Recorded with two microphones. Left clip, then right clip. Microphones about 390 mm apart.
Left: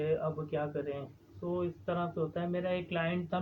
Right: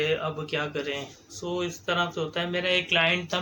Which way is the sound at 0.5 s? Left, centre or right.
Left.